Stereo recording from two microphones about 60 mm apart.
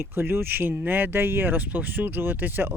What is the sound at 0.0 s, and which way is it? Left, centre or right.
Speech, right.